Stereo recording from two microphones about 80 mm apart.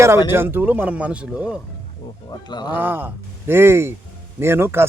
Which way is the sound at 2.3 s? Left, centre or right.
Left.